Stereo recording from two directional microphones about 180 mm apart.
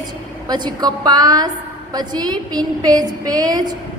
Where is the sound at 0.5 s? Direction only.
20° right (ahead or behind).